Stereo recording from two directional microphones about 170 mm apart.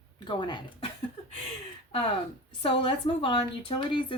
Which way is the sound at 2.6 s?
30° left (ahead or behind).